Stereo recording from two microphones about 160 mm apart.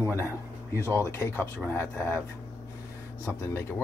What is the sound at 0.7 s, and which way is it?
Speech, 15° left (ahead or behind).